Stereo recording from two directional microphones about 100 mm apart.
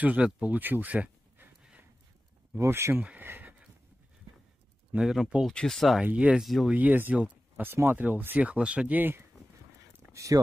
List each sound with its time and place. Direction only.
0.0 s speech: 15° right (ahead or behind)
2.5 s speech: 25° right (ahead or behind)
4.9 s speech: 5° right (ahead or behind)
5.5 s speech: 5° left (ahead or behind)
5.9 s speech: 10° right (ahead or behind)
6.7 s speech: 15° right (ahead or behind)
10.1 s speech: 35° right (ahead or behind)